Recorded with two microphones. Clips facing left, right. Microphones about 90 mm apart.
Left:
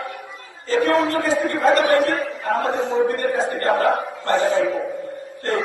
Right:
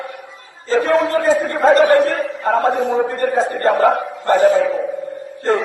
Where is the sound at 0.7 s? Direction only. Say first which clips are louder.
Right 3 dB; 30° right (ahead or behind).